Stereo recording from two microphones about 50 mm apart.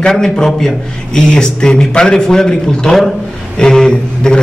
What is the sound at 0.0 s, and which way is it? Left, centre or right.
A man's voice, centre.